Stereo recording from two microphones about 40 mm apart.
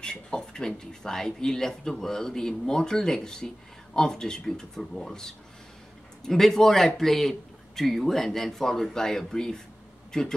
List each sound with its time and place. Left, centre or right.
0.0 s speech: left